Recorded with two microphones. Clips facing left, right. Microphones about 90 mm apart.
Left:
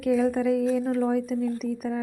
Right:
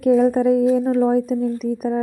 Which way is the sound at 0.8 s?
35° right (ahead or behind).